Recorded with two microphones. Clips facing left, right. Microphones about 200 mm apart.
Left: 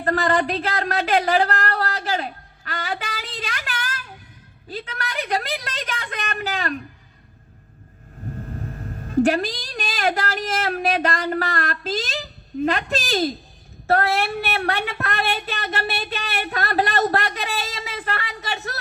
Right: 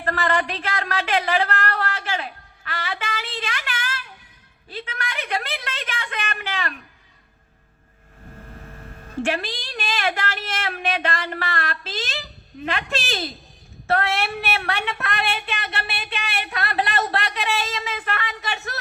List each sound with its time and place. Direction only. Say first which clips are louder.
0.0 s a sound: left 3 dB; 35° left (ahead or behind)
4.7 s a woman's voice: left 2 dB; 35° left (ahead or behind)
8.4 s a woman's voice: left 7 dB; 40° left (ahead or behind)